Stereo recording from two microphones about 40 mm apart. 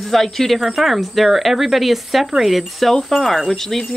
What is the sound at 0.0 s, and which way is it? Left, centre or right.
Speech, centre.